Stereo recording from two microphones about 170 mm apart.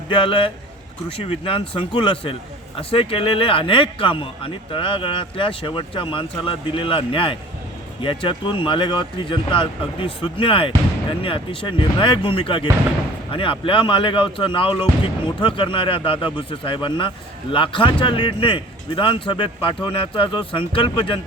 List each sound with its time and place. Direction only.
0.1 s a man's voice: 30° left (ahead or behind)